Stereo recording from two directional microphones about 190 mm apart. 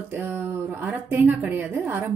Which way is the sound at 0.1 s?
10° right (ahead or behind).